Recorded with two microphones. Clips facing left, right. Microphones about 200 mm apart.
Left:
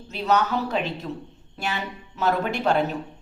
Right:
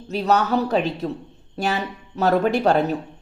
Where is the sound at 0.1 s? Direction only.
40° right (ahead or behind).